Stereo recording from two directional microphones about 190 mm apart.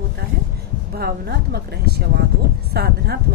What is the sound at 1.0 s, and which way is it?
Speech, 55° right (ahead or behind).